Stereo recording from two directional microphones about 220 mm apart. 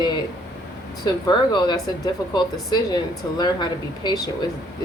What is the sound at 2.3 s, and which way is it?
A woman's voice, 20° left (ahead or behind).